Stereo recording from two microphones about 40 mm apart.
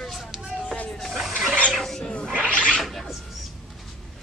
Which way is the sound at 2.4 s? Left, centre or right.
Left.